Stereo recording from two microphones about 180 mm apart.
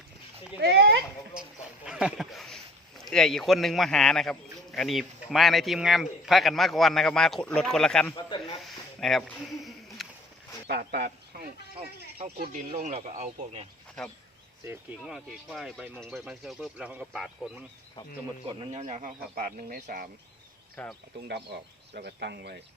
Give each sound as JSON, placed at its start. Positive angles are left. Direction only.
{"t": 0.6, "sound": "a sound", "side_deg": -70}
{"t": 1.3, "sound": "a sound", "side_deg": -5}
{"t": 3.0, "sound": "speech", "side_deg": 5}
{"t": 8.1, "sound": "speech", "side_deg": 25}
{"t": 8.6, "sound": "a sound", "side_deg": 0}
{"t": 10.7, "sound": "speech", "side_deg": -65}
{"t": 12.4, "sound": "speech", "side_deg": -45}
{"t": 15.0, "sound": "speech", "side_deg": 0}
{"t": 18.7, "sound": "speech", "side_deg": -40}
{"t": 20.8, "sound": "speech", "side_deg": 5}
{"t": 21.2, "sound": "speech", "side_deg": -60}